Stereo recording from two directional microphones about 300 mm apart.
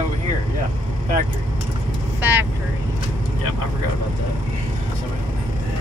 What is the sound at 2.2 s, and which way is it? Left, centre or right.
Vehicle, centre.